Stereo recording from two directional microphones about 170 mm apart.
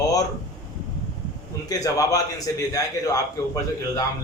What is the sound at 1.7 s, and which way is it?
A man's voice, 20° left (ahead or behind).